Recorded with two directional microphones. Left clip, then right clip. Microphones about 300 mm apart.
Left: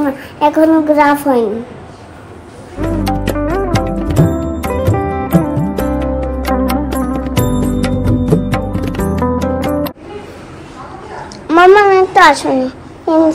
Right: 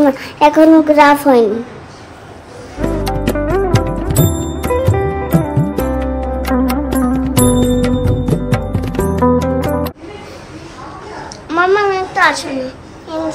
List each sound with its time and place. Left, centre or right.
0.4 s a woman's voice: centre
2.8 s music: centre
11.4 s a sound: left